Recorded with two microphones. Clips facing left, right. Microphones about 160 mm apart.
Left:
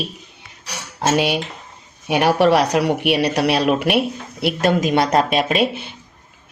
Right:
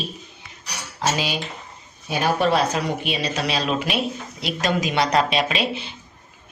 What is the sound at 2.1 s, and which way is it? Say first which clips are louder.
Speech: left 6 dB; 75° left (ahead or behind).